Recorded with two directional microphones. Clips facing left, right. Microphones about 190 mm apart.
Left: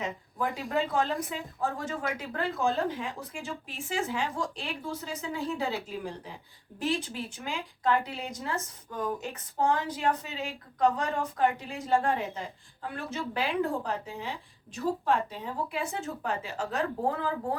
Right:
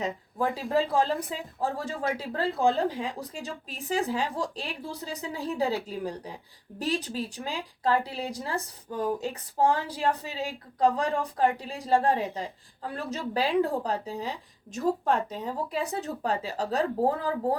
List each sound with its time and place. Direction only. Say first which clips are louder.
0.0 s speech: right 3 dB; 35° right (ahead or behind)